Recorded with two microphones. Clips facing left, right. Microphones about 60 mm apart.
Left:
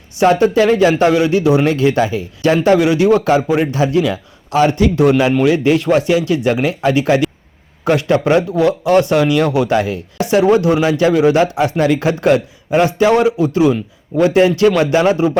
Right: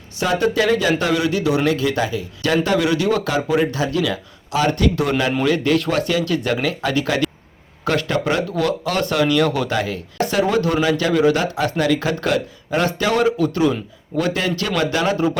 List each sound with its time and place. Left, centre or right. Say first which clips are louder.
0.2 s a man's voice: left 7 dB; left
4.9 s a man's voice: left 7 dB; centre